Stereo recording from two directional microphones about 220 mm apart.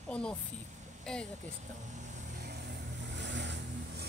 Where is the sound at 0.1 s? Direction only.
5° left (ahead or behind).